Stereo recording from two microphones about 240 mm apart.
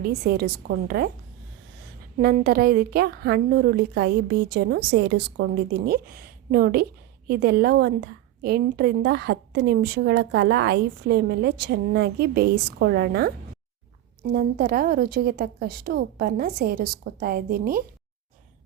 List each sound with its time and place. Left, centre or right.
0.0 s a woman's voice: right
2.1 s a woman's voice: right
14.3 s a woman's voice: right